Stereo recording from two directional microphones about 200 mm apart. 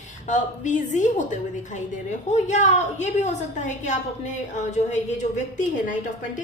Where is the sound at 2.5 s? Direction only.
35° left (ahead or behind).